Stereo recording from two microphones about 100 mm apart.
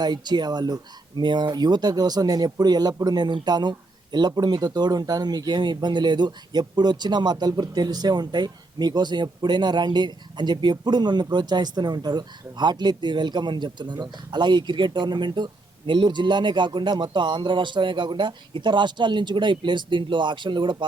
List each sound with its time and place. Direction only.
0.0 s speech: 45° right (ahead or behind)